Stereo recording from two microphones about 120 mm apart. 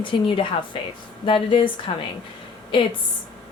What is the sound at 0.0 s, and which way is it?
Speech, 45° left (ahead or behind).